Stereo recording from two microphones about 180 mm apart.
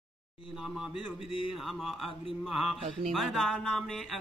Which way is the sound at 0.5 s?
5° right (ahead or behind).